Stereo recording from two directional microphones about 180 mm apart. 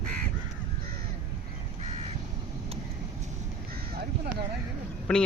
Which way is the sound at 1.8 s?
40° right (ahead or behind).